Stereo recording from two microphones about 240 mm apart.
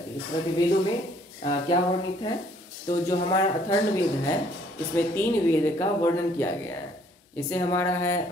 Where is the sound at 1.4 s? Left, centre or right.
Centre.